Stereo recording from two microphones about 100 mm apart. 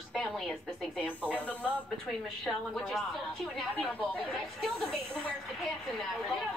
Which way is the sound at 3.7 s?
15° left (ahead or behind).